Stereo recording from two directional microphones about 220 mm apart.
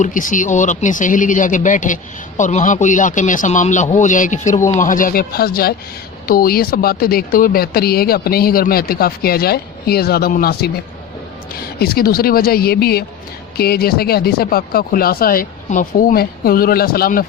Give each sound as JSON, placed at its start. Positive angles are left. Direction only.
{"t": 0.0, "sound": "speech", "side_deg": 35}
{"t": 11.8, "sound": "speech", "side_deg": 45}